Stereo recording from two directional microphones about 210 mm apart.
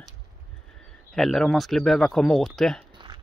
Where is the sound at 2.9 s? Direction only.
20° right (ahead or behind).